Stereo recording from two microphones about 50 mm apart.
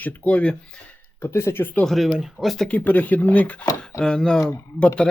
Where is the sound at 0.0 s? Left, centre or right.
Left.